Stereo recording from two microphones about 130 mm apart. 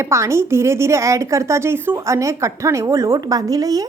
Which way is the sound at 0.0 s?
20° right (ahead or behind).